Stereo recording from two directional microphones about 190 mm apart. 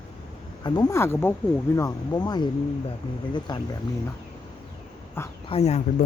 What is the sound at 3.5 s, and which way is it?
Speech, 20° left (ahead or behind).